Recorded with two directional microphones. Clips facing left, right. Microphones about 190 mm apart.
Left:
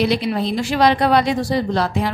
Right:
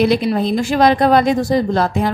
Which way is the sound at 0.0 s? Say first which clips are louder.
Right 4 dB; 50° right (ahead or behind).